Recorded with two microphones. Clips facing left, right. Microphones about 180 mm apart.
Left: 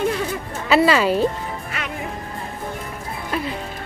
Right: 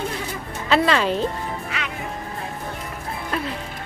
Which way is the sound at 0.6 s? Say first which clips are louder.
Left 3 dB; 5° left (ahead or behind).